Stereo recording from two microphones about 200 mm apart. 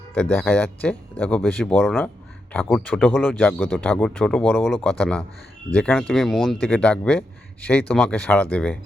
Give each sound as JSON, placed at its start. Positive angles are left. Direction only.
{"t": 0.1, "sound": "speech", "side_deg": 5}